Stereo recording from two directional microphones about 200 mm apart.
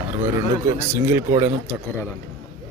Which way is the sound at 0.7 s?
10° right (ahead or behind).